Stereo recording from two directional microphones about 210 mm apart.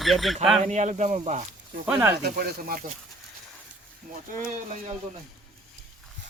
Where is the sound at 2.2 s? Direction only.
45° right (ahead or behind).